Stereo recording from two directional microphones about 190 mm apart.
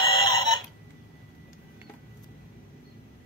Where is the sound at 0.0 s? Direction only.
25° left (ahead or behind).